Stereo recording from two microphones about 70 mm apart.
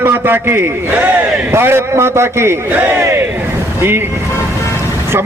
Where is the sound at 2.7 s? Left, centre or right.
Right.